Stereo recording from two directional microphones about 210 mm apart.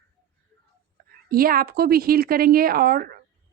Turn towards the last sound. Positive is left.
turn(degrees=-45)  # may be behind; listen again after turning